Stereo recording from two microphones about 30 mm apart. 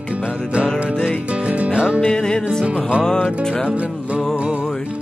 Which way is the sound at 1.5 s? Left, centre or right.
Right.